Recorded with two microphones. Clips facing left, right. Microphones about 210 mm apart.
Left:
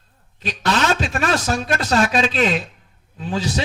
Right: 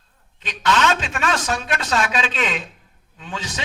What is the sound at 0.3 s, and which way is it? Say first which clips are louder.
A man's voice: even; 35° left (ahead or behind).